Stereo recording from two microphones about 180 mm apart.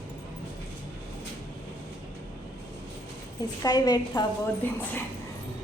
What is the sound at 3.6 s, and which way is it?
Speech, 20° left (ahead or behind).